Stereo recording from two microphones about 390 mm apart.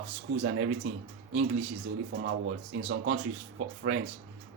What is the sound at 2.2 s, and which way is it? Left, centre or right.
Speech, right.